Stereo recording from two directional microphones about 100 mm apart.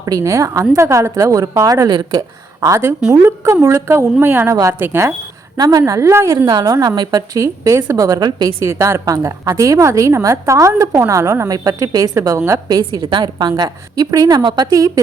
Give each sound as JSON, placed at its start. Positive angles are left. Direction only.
{"t": 0.0, "sound": "a woman's voice", "side_deg": -35}
{"t": 5.5, "sound": "a woman's voice", "side_deg": -35}
{"t": 6.4, "sound": "a woman's voice", "side_deg": -45}
{"t": 12.8, "sound": "a woman's voice", "side_deg": -55}